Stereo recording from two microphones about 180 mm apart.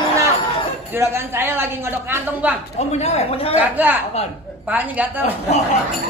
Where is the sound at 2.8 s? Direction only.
35° left (ahead or behind).